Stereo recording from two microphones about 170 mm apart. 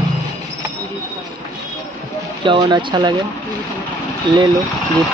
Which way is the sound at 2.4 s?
25° right (ahead or behind).